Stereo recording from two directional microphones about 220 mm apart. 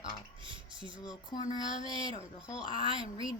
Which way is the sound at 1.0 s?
20° left (ahead or behind).